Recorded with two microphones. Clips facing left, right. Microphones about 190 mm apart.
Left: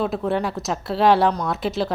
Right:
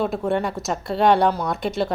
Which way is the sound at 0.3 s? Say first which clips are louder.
Even; centre (ahead or behind).